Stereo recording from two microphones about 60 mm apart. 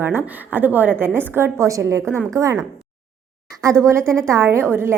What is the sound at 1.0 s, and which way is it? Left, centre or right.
Speech, right.